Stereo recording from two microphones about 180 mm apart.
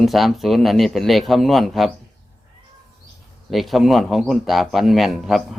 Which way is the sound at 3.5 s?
Centre (ahead or behind).